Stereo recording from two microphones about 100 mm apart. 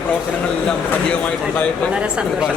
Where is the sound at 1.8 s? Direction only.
10° right (ahead or behind).